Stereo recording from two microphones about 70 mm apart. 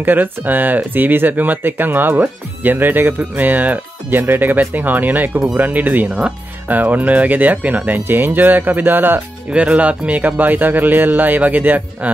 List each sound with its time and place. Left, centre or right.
0.0 s speech: right
9.5 s speech: centre